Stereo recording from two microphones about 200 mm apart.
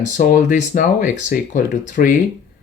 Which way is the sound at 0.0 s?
40° left (ahead or behind).